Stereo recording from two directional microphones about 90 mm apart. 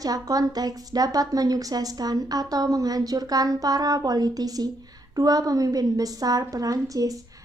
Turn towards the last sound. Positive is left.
turn(degrees=-40)  # may be behind; listen again after turning